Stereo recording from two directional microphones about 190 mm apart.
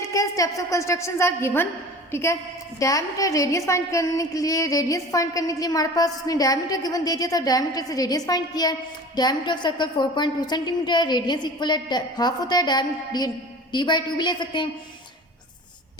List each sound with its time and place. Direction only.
0.0 s a woman's voice: 15° left (ahead or behind)